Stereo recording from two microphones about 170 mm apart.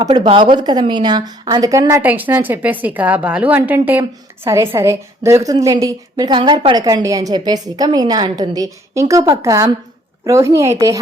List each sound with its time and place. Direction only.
0.2 s a woman's voice: 35° right (ahead or behind)